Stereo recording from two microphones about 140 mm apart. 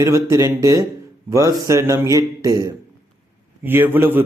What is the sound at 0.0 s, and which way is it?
A man's voice, 20° right (ahead or behind).